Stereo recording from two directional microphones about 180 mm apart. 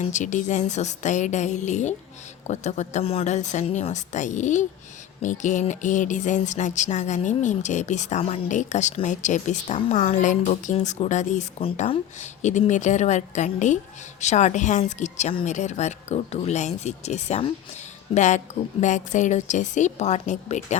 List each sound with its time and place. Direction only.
0.0 s music: 45° left (ahead or behind)